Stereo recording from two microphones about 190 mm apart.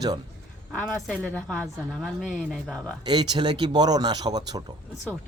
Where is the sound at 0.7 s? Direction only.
10° left (ahead or behind).